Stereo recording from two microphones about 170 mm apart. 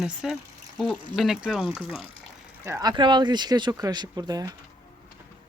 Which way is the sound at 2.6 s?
20° right (ahead or behind).